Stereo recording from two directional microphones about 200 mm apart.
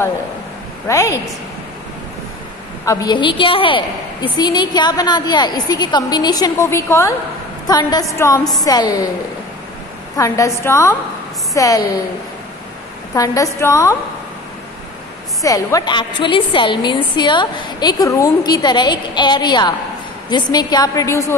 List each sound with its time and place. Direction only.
0.8 s a woman's voice: 15° left (ahead or behind)
2.8 s a woman's voice: 15° left (ahead or behind)
10.1 s a woman's voice: 15° left (ahead or behind)
13.1 s a woman's voice: 15° left (ahead or behind)
15.4 s a woman's voice: 15° left (ahead or behind)